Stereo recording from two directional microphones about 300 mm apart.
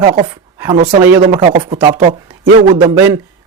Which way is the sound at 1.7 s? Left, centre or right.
Centre.